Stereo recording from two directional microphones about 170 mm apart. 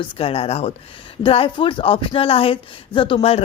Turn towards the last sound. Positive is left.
turn(degrees=35)  # may be behind; listen again after turning